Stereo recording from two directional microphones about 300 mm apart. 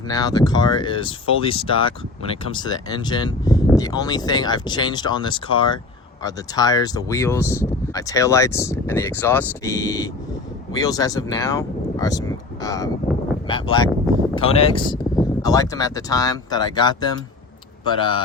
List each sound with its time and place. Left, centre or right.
0.1 s speech: centre